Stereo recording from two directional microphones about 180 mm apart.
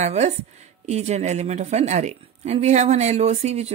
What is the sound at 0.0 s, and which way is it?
Speech, 40° right (ahead or behind).